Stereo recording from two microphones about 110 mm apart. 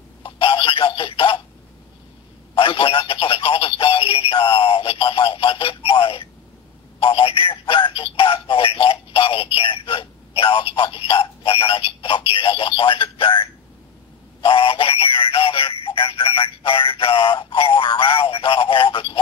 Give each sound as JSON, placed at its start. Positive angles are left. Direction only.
{"t": 0.2, "sound": "alarm clock", "side_deg": 55}
{"t": 2.5, "sound": "telephone", "side_deg": 55}
{"t": 14.4, "sound": "synthetic singing", "side_deg": 55}
{"t": 17.9, "sound": "a sound", "side_deg": 55}